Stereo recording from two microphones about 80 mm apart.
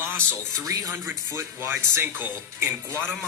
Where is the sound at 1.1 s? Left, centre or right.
Right.